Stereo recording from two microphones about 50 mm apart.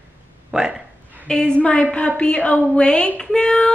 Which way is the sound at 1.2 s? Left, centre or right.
Centre.